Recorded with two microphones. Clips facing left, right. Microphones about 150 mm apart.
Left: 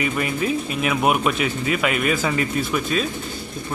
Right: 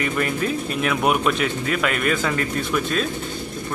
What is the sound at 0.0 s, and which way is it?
Speech, 5° left (ahead or behind).